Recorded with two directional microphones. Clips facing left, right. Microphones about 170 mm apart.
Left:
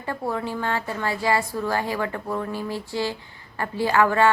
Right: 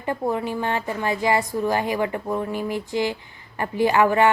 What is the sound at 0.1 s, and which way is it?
A woman's voice, 20° right (ahead or behind).